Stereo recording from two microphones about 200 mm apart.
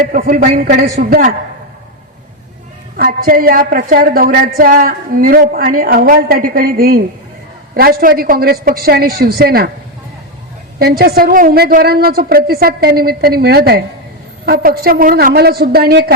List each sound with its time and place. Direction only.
0.1 s a woman's voice: 40° right (ahead or behind)
3.0 s a woman's voice: 45° right (ahead or behind)
10.8 s a woman's voice: 50° right (ahead or behind)